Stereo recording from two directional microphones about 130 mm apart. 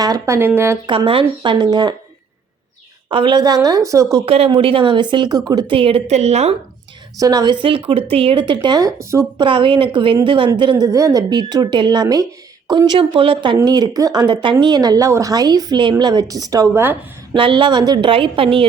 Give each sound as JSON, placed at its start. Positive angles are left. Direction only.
{"t": 0.0, "sound": "speech", "side_deg": -30}
{"t": 0.3, "sound": "speech", "side_deg": -20}
{"t": 0.9, "sound": "speech", "side_deg": -40}
{"t": 3.1, "sound": "speech", "side_deg": -40}
{"t": 4.3, "sound": "speech", "side_deg": -50}
{"t": 5.7, "sound": "a woman's voice", "side_deg": -45}
{"t": 7.2, "sound": "speech", "side_deg": -30}
{"t": 7.6, "sound": "speech", "side_deg": -45}
{"t": 9.4, "sound": "speech", "side_deg": -40}
{"t": 17.3, "sound": "speech", "side_deg": -40}
{"t": 18.1, "sound": "a woman's voice", "side_deg": -45}